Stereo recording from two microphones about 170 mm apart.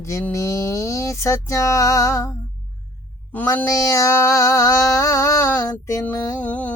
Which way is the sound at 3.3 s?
10° left (ahead or behind).